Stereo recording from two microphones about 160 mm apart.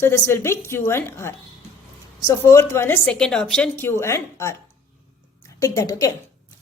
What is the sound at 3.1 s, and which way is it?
A woman's voice, 5° left (ahead or behind).